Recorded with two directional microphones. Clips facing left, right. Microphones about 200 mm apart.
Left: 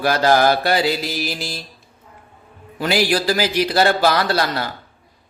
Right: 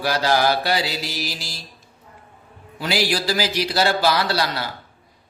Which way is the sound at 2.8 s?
55° left (ahead or behind).